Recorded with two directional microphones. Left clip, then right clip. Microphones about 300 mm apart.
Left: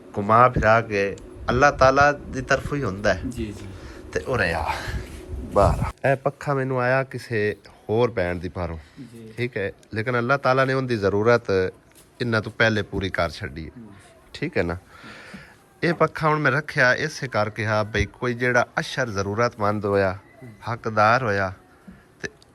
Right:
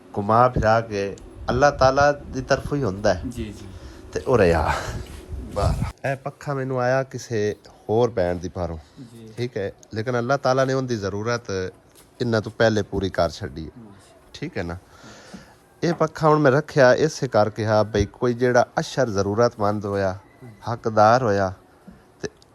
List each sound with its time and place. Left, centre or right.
0.1 s a man's voice: centre
5.5 s a man's voice: centre
22.2 s hiccup: centre